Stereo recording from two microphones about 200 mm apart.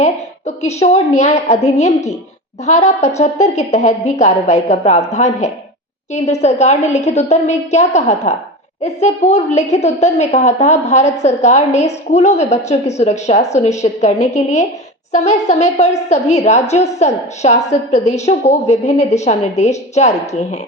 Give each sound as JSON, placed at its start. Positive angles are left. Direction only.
{"t": 0.0, "sound": "a woman's voice", "side_deg": 35}